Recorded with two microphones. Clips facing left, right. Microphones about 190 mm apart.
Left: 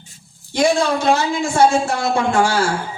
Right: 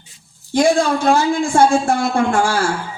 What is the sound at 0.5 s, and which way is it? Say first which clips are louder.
Speech: right 2 dB; 55° right (ahead or behind).